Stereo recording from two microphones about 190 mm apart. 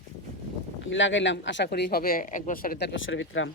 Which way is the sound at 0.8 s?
75° left (ahead or behind).